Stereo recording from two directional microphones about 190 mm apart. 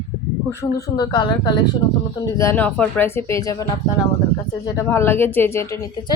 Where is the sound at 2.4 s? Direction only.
10° left (ahead or behind).